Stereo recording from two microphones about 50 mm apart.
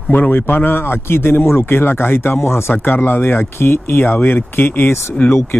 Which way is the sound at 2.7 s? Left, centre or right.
Left.